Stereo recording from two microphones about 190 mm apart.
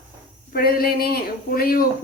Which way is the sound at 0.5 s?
55° left (ahead or behind).